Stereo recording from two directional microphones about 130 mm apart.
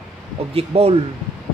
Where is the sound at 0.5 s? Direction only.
50° right (ahead or behind).